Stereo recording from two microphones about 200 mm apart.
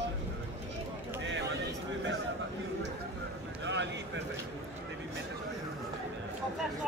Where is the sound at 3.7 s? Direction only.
60° right (ahead or behind).